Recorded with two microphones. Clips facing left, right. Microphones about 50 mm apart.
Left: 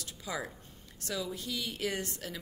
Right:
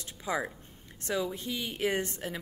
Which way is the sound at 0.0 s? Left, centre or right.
Right.